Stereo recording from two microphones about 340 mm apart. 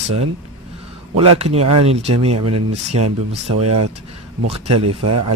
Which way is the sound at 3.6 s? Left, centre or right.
Right.